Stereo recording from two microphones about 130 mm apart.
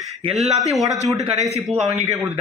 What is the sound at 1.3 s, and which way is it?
Speech, 60° right (ahead or behind).